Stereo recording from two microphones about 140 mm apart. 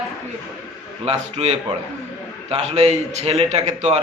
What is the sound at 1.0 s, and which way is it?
A man's voice, 45° right (ahead or behind).